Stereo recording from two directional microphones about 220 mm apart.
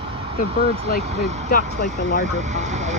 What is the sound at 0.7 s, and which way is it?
Speech, 25° right (ahead or behind).